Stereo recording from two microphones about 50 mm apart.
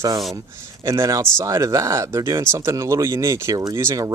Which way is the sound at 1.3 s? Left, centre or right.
Right.